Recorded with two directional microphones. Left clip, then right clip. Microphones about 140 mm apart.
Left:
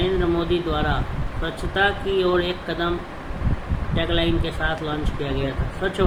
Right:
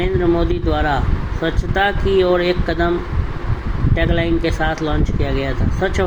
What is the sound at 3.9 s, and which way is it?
Speech, 45° right (ahead or behind).